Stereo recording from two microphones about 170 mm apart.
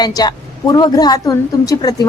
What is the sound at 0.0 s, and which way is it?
A woman's voice, 25° left (ahead or behind).